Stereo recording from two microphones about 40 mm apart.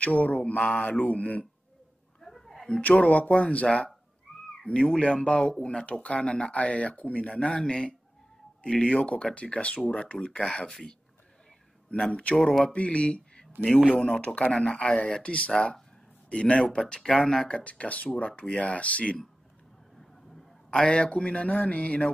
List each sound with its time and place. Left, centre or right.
0.0 s speech: left
0.9 s speech: left
2.2 s a sound: centre
3.0 s speech: left
5.9 s speech: left
8.9 s speech: left
12.0 s speech: left
15.5 s speech: centre
16.3 s speech: left
16.7 s speech: centre
17.6 s speech: left
20.8 s speech: left